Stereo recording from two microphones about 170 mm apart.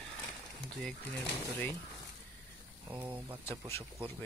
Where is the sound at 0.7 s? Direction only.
5° left (ahead or behind).